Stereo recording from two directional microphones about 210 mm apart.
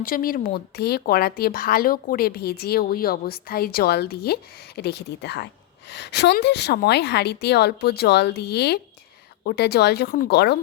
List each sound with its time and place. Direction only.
0.0 s speech: 45° left (ahead or behind)